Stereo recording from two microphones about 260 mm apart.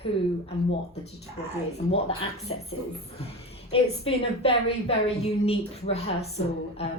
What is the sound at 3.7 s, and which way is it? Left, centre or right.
A woman's voice, left.